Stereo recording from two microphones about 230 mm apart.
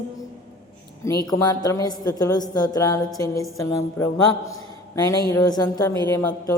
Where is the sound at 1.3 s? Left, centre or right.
Centre.